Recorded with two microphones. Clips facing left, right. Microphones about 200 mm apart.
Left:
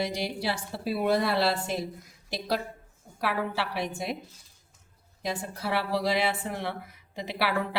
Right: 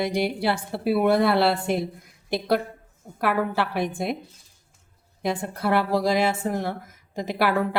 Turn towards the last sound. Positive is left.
turn(degrees=-50)  # may be behind; listen again after turning